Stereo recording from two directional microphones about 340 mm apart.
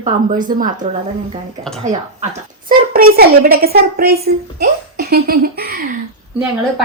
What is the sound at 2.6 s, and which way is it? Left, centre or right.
Speech, right.